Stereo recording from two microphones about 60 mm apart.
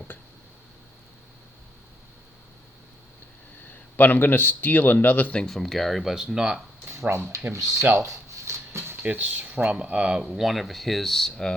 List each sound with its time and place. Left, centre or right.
3.7 s speech: left
5.4 s speech: centre
6.8 s speech: right
7.5 s speech: right
7.9 s a sound: right
9.1 s speech: right; by 11.5 s centre